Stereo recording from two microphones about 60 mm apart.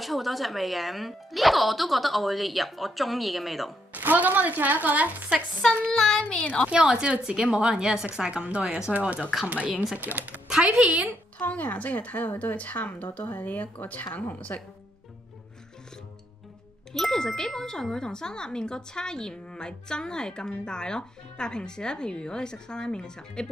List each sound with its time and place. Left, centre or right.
0.0 s speech: centre
3.9 s speech: right
5.9 s speech: centre
6.7 s a woman's voice: centre
8.9 s speech: right
10.5 s a woman's voice: centre
11.3 s speech: left
16.9 s speech: centre